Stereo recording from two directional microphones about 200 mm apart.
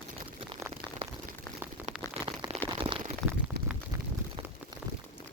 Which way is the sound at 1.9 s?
30° right (ahead or behind).